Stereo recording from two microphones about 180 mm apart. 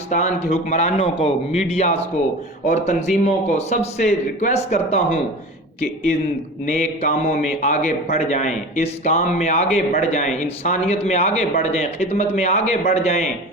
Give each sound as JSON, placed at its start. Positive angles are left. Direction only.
{"t": 0.1, "sound": "a man's voice", "side_deg": 35}
{"t": 6.7, "sound": "a man's voice", "side_deg": 40}